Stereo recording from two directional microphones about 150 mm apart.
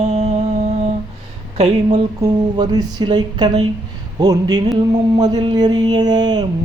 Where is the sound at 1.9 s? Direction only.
25° right (ahead or behind).